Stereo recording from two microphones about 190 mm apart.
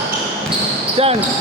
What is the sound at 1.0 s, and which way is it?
Basketball bounce, 30° right (ahead or behind).